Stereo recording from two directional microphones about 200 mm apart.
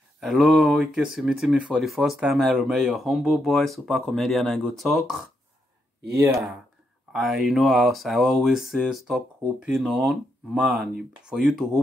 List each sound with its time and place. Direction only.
0.2 s speech: centre (ahead or behind)
7.1 s speech: centre (ahead or behind)